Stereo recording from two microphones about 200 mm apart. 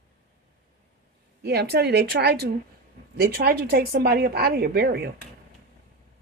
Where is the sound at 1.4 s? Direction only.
55° right (ahead or behind).